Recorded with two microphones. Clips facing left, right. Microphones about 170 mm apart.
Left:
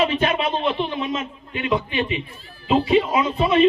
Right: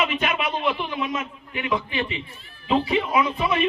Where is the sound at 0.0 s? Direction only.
30° left (ahead or behind).